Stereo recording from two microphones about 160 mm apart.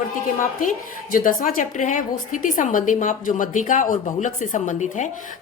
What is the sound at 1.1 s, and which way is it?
A woman's voice, 60° left (ahead or behind).